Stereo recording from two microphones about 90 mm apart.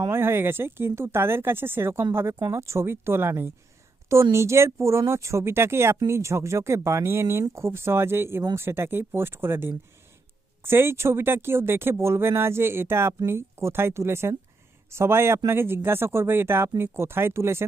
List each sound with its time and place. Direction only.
0.1 s speech: 25° right (ahead or behind)